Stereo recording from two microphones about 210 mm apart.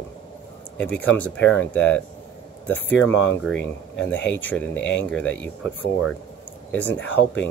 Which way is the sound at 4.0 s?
55° left (ahead or behind).